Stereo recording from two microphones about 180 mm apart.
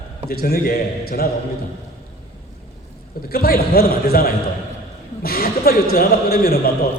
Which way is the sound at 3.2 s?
55° left (ahead or behind).